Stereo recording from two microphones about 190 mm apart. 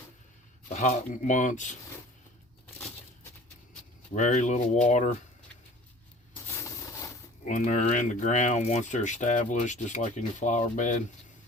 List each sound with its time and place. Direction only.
0.7 s speech: 40° left (ahead or behind)
4.1 s speech: 40° left (ahead or behind)
7.4 s speech: 40° left (ahead or behind)